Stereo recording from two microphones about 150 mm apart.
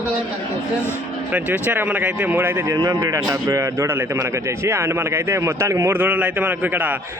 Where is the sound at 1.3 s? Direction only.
10° right (ahead or behind).